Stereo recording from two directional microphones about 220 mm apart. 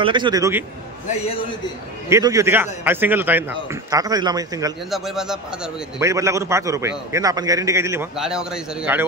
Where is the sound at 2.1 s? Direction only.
15° right (ahead or behind).